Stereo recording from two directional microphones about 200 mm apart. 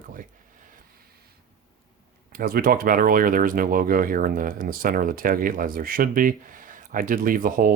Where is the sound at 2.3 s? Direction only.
45° right (ahead or behind).